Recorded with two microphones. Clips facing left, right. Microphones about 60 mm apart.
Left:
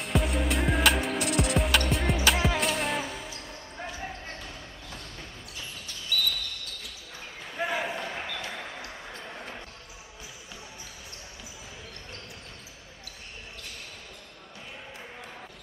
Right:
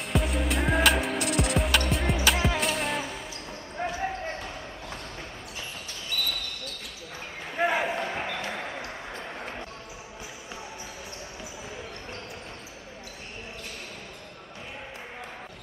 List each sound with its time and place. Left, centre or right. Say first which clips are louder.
0.0 s music: even; centre
3.7 s basketball bounce: right 8 dB; right
6.1 s basketball bounce: left 2 dB; right
7.5 s basketball bounce: right 5 dB; right